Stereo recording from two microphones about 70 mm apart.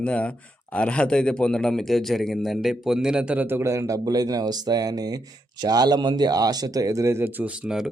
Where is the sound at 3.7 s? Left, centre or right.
Right.